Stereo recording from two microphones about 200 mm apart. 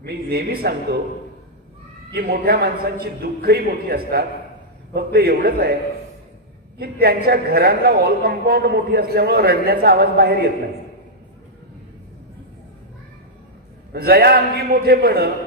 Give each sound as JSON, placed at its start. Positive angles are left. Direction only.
{"t": 0.0, "sound": "a woman's voice", "side_deg": -50}
{"t": 2.1, "sound": "a woman's voice", "side_deg": -50}
{"t": 6.8, "sound": "a woman's voice", "side_deg": -50}
{"t": 13.9, "sound": "a woman's voice", "side_deg": -50}